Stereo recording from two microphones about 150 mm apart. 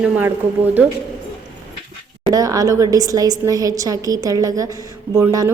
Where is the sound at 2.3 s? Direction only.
25° right (ahead or behind).